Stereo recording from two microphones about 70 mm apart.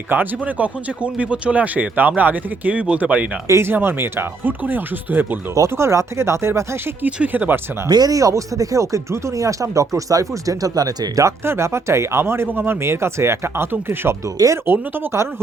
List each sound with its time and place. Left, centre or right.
0.1 s speech: right
3.4 s speech: right
3.7 s speech: right
5.5 s speech: right
7.0 s speech: right
7.9 s speech: right
11.4 s speech: right
14.3 s speech: right
14.7 s speech: right